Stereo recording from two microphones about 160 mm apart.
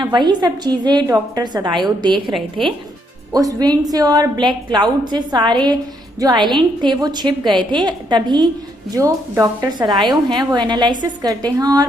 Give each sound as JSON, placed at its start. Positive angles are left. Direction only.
{"t": 0.0, "sound": "a woman's voice", "side_deg": -25}
{"t": 3.3, "sound": "a woman's voice", "side_deg": -25}